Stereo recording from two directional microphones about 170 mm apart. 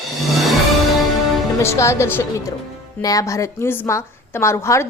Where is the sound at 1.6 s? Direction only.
15° left (ahead or behind).